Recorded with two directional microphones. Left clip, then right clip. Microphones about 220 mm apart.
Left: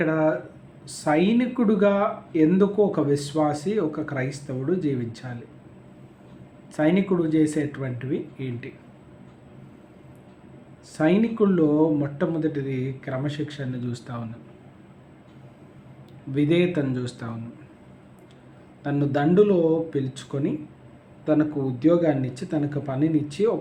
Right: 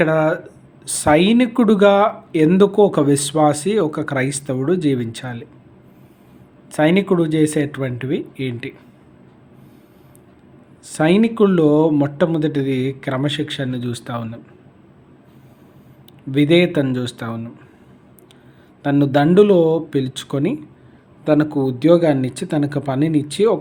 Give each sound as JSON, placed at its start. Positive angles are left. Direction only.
{"t": 0.0, "sound": "speech", "side_deg": -45}
{"t": 6.7, "sound": "speech", "side_deg": -45}
{"t": 10.8, "sound": "speech", "side_deg": -45}
{"t": 16.3, "sound": "speech", "side_deg": -45}
{"t": 18.8, "sound": "speech", "side_deg": -45}